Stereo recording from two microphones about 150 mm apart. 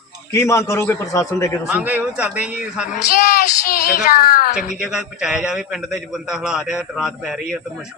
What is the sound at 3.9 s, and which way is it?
Speech, 75° left (ahead or behind).